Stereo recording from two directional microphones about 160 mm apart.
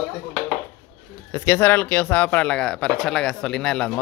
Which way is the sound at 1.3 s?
15° left (ahead or behind).